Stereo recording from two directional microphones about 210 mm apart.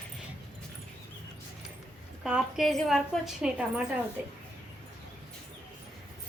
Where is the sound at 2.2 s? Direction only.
Centre (ahead or behind).